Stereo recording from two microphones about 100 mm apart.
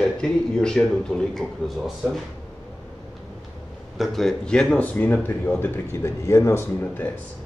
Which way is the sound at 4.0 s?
5° left (ahead or behind).